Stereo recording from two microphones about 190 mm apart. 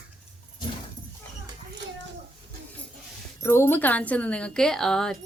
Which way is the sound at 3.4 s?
15° left (ahead or behind).